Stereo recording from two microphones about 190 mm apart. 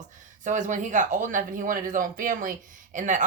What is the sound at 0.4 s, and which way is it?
Speech, 40° right (ahead or behind).